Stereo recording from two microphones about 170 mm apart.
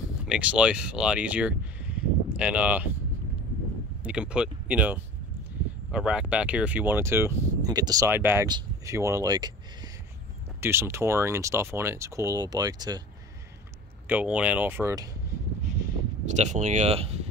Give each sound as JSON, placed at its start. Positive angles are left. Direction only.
{"t": 0.3, "sound": "speech", "side_deg": -5}
{"t": 4.0, "sound": "speech", "side_deg": -5}
{"t": 14.0, "sound": "speech", "side_deg": -10}
{"t": 16.3, "sound": "speech", "side_deg": -45}